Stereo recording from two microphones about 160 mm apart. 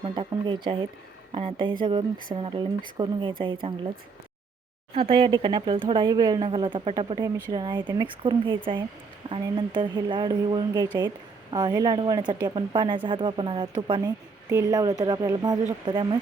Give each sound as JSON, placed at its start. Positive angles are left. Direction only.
{"t": 0.0, "sound": "speech", "side_deg": -30}
{"t": 4.9, "sound": "speech", "side_deg": -35}